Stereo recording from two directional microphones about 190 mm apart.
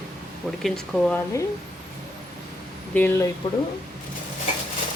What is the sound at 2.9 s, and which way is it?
Speech, 10° left (ahead or behind).